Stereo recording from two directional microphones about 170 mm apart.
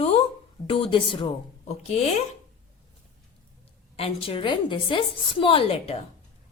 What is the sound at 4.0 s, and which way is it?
A woman's voice, 35° left (ahead or behind).